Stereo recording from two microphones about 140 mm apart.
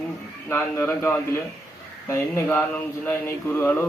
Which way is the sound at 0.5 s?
15° left (ahead or behind).